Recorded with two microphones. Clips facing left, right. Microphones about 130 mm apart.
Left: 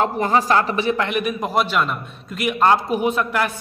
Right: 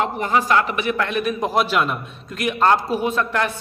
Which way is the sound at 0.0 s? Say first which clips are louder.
Left 2 dB; 40° left (ahead or behind).